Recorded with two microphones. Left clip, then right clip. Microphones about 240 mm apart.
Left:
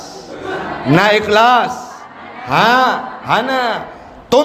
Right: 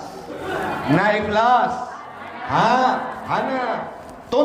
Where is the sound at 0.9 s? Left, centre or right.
Left.